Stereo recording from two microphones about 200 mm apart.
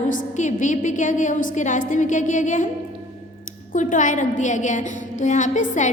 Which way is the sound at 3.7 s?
40° left (ahead or behind).